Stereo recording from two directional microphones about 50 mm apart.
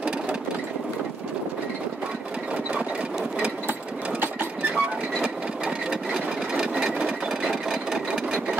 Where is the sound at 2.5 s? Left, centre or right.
Right.